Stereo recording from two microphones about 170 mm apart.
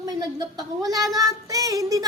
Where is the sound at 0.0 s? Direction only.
20° right (ahead or behind).